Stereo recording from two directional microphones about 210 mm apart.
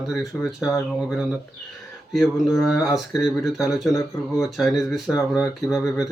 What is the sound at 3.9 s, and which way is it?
Speech, 15° left (ahead or behind).